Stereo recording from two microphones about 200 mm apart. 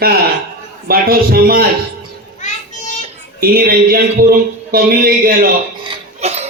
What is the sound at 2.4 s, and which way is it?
Children playing, 35° left (ahead or behind).